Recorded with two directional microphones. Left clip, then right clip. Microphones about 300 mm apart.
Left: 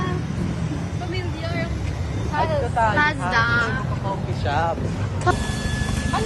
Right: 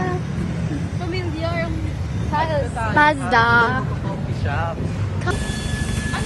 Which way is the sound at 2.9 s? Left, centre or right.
Centre.